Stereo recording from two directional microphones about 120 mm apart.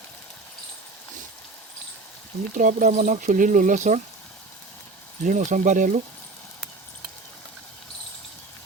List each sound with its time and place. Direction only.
2.6 s speech: 90° right
5.2 s speech: 90° right